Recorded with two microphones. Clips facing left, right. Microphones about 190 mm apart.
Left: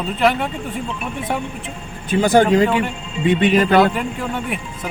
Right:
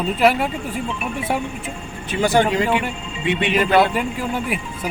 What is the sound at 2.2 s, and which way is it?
A man's voice, 45° left (ahead or behind).